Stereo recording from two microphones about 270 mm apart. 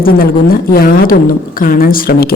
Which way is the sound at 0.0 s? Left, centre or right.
Left.